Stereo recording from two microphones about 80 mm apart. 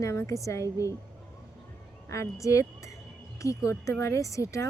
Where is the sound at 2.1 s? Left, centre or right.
Left.